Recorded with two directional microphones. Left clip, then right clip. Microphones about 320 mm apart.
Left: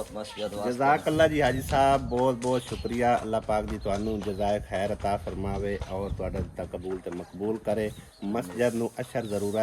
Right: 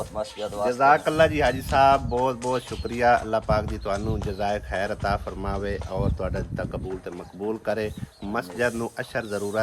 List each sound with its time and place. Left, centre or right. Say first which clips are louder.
0.7 s speech: right 5 dB; centre
7.6 s speech: right 2 dB; centre